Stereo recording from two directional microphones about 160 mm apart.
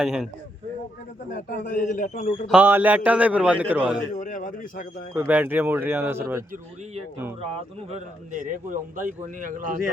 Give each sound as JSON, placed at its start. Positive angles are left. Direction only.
{"t": 0.0, "sound": "speech", "side_deg": -5}
{"t": 1.3, "sound": "a man's voice", "side_deg": 60}
{"t": 2.5, "sound": "a man's voice", "side_deg": -10}
{"t": 4.1, "sound": "a man's voice", "side_deg": 55}
{"t": 5.1, "sound": "a man's voice", "side_deg": -10}
{"t": 7.5, "sound": "a man's voice", "side_deg": -45}